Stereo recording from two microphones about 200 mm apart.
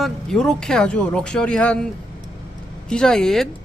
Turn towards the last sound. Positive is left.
turn(degrees=0)  # may be behind; listen again after turning